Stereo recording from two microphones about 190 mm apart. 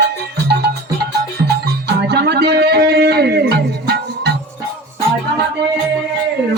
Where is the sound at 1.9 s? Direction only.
60° right (ahead or behind).